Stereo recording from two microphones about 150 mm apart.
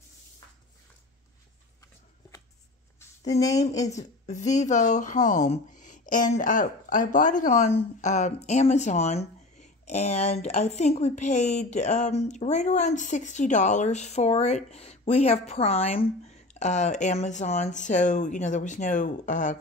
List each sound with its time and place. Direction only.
3.3 s speech: 25° left (ahead or behind)
4.3 s speech: 50° left (ahead or behind)